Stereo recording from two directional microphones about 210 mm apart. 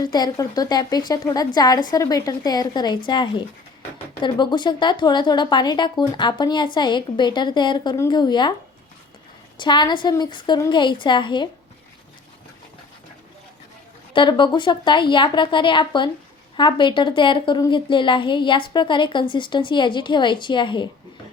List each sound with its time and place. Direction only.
0.0 s a woman's voice: 20° left (ahead or behind)
9.6 s a woman's voice: 20° left (ahead or behind)
14.1 s a woman's voice: 20° left (ahead or behind)